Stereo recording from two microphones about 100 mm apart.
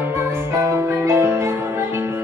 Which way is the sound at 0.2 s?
25° right (ahead or behind).